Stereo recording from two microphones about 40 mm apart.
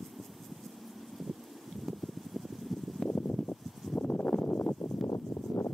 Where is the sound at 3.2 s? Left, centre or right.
Centre.